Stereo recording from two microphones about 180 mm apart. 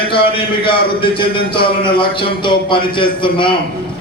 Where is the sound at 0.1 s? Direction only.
30° left (ahead or behind).